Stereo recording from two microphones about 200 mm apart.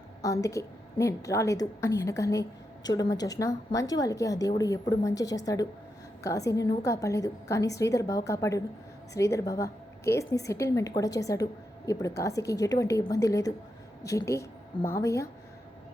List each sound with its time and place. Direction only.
0.2 s a woman's voice: 15° left (ahead or behind)